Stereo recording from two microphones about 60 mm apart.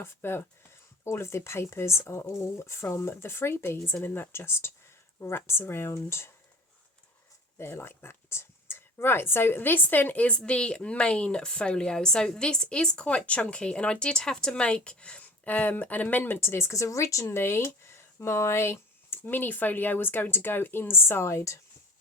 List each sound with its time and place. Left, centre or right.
0.0 s speech: left
7.6 s a woman's voice: left
16.4 s speech: left
17.3 s speech: left